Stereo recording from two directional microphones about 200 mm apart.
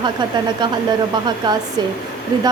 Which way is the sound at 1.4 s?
20° right (ahead or behind).